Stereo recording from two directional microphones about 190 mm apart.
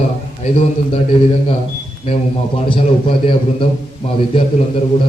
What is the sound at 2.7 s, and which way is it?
A man's voice, 25° left (ahead or behind).